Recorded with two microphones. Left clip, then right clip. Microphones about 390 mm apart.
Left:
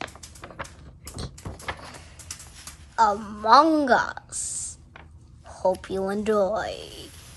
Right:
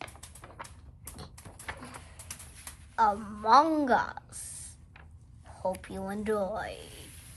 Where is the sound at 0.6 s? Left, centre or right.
Left.